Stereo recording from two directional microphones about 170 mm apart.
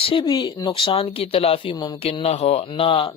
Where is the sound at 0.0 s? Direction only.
30° left (ahead or behind).